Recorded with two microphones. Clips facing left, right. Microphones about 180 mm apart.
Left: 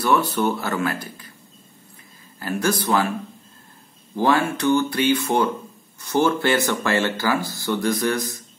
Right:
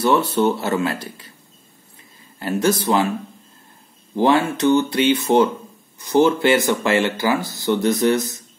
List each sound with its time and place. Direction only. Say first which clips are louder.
0.0 s speech: right 3 dB; 25° right (ahead or behind)
2.4 s speech: right 4 dB; 20° right (ahead or behind)
4.2 s speech: right 3 dB; 20° right (ahead or behind)